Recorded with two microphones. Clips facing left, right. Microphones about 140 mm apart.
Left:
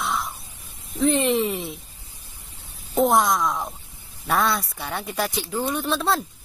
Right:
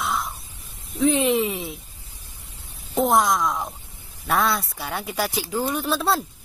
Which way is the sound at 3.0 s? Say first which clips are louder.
Even; centre (ahead or behind).